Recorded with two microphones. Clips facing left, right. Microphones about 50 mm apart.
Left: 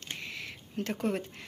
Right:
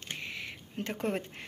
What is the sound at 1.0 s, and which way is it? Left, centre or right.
Speech, right.